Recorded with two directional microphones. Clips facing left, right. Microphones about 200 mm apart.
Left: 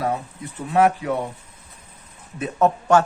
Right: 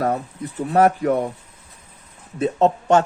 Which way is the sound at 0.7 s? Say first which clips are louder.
Right 2 dB; 40° right (ahead or behind).